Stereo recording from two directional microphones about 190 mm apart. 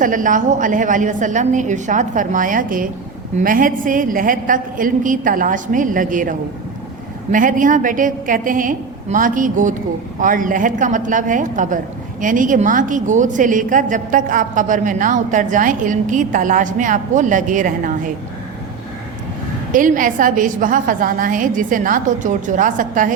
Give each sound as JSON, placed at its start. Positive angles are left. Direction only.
{"t": 0.0, "sound": "a woman's voice", "side_deg": -45}
{"t": 19.7, "sound": "a woman's voice", "side_deg": -45}